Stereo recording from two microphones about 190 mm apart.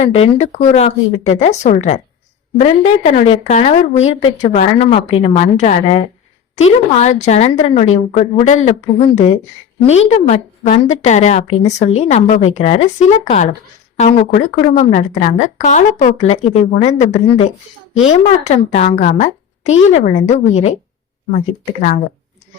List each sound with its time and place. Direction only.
0.0 s a woman's voice: 30° left (ahead or behind)
21.8 s a woman's voice: 40° left (ahead or behind)